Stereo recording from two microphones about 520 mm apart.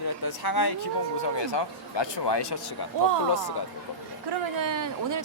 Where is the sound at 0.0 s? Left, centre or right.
Left.